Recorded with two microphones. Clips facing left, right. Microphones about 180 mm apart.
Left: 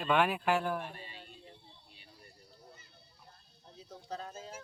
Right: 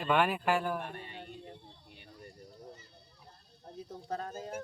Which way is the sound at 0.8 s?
55° right (ahead or behind).